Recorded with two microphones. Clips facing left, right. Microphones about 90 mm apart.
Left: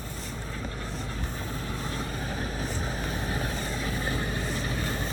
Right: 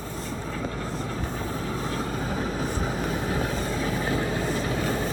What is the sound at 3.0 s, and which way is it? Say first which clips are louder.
Vehicle: right 5 dB; 90° right.